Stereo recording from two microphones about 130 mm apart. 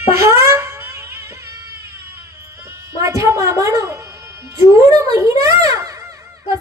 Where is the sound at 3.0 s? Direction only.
25° right (ahead or behind).